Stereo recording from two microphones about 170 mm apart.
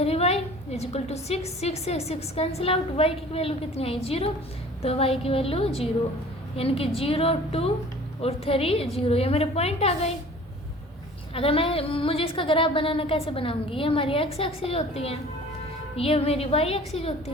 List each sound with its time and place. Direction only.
0.0 s a woman's voice: 40° left (ahead or behind)
11.3 s a woman's voice: 35° left (ahead or behind)